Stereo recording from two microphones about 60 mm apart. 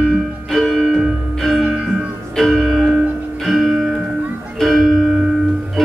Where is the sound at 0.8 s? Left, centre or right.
Centre.